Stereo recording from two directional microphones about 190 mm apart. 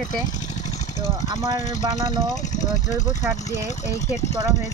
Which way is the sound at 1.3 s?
20° right (ahead or behind).